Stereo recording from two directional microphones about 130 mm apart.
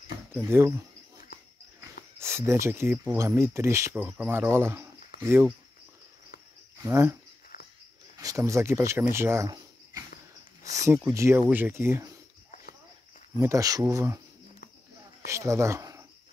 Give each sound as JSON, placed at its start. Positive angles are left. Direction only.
{"t": 0.3, "sound": "speech", "side_deg": -15}
{"t": 6.8, "sound": "speech", "side_deg": -20}
{"t": 7.5, "sound": "a sound", "side_deg": 90}
{"t": 8.2, "sound": "speech", "side_deg": -25}
{"t": 9.2, "sound": "cricket", "side_deg": -20}
{"t": 10.6, "sound": "speech", "side_deg": -25}
{"t": 13.4, "sound": "speech", "side_deg": -25}
{"t": 15.2, "sound": "speech", "side_deg": -20}